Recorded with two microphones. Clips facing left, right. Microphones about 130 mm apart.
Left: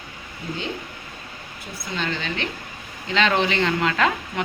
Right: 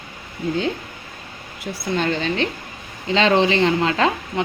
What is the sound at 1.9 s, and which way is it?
Speech, 40° right (ahead or behind).